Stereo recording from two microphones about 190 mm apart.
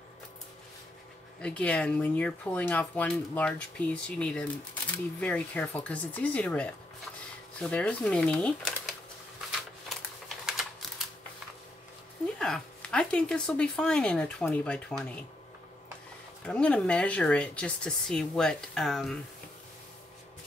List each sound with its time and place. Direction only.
1.4 s speech: 5° left (ahead or behind)
9.8 s typing: centre (ahead or behind)
12.4 s speech: 5° left (ahead or behind)
16.4 s speech: 5° left (ahead or behind)